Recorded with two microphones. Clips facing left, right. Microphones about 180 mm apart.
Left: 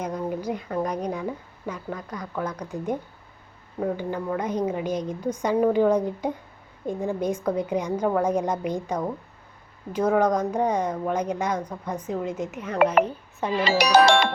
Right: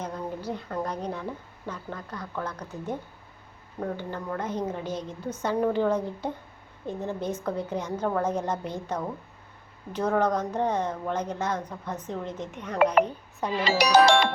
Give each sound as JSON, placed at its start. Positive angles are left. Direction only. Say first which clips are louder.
{"t": 0.0, "sound": "a woman's voice", "louder": "left 5 dB", "side_deg": 15}
{"t": 13.6, "sound": "speech", "louder": "left 2 dB", "side_deg": 60}